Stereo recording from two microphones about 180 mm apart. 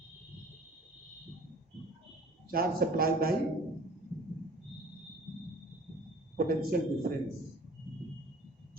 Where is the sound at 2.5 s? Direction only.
55° right (ahead or behind).